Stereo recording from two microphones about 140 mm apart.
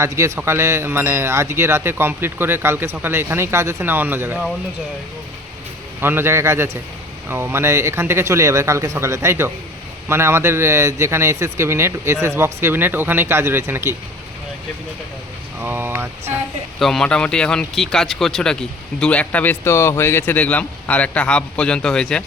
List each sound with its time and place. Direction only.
0.0 s speech: 20° right (ahead or behind)
6.0 s speech: 15° right (ahead or behind)
15.6 s speech: 15° right (ahead or behind)
16.8 s speech: 5° left (ahead or behind)